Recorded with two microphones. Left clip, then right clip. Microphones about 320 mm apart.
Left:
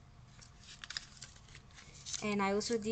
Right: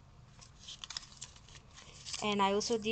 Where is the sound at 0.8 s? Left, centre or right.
Centre.